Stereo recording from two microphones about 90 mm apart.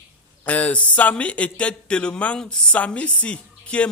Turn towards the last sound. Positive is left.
turn(degrees=15)  # may be behind; listen again after turning